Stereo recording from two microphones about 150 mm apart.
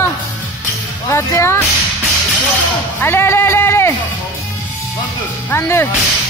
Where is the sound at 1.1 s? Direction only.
20° left (ahead or behind).